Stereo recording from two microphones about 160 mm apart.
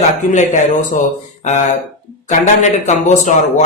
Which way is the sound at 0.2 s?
50° left (ahead or behind).